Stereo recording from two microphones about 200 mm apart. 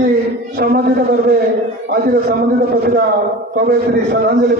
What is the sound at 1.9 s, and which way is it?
A man's voice, 50° right (ahead or behind).